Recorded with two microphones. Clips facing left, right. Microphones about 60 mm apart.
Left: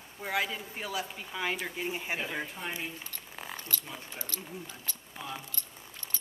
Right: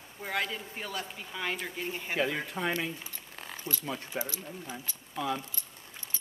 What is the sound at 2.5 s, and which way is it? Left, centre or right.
Speech, right.